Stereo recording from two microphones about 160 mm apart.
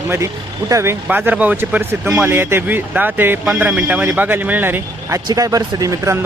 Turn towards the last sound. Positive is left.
turn(degrees=-20)  # may be behind; listen again after turning